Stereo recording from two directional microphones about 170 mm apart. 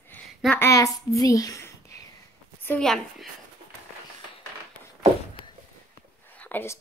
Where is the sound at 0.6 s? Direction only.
20° left (ahead or behind).